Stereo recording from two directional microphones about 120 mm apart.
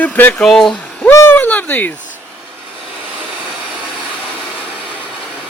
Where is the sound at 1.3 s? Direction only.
15° left (ahead or behind).